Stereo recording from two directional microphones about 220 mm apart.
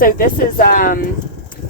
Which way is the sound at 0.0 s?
40° left (ahead or behind).